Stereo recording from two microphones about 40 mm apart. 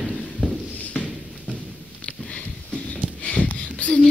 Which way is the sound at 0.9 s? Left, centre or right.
Left.